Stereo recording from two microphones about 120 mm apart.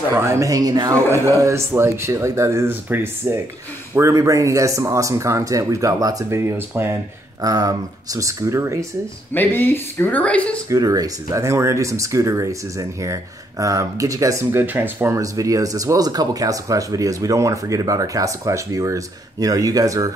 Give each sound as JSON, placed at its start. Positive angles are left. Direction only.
{"t": 0.1, "sound": "speech", "side_deg": -20}
{"t": 7.4, "sound": "speech", "side_deg": -30}
{"t": 9.3, "sound": "speech", "side_deg": 15}
{"t": 10.7, "sound": "speech", "side_deg": -30}
{"t": 15.1, "sound": "speech", "side_deg": -30}